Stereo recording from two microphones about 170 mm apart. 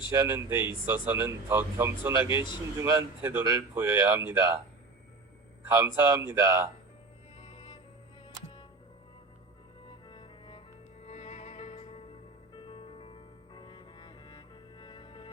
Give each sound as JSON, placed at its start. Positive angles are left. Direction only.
{"t": 0.1, "sound": "speech", "side_deg": -15}
{"t": 5.6, "sound": "speech", "side_deg": -20}
{"t": 7.4, "sound": "music", "side_deg": 30}
{"t": 10.1, "sound": "cello", "side_deg": 30}
{"t": 11.0, "sound": "music", "side_deg": 40}